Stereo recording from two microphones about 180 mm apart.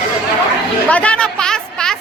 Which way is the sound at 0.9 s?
5° left (ahead or behind).